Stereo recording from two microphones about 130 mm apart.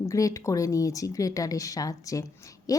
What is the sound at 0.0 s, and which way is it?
Speech, 25° left (ahead or behind).